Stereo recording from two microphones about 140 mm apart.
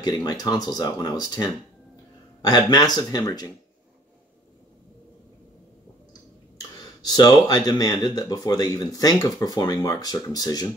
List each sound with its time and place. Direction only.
0.0 s speech: 30° left (ahead or behind)
6.8 s speech: 30° left (ahead or behind)